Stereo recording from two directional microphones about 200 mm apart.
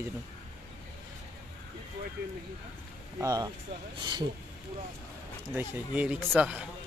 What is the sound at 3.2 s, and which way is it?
Speech, 20° right (ahead or behind).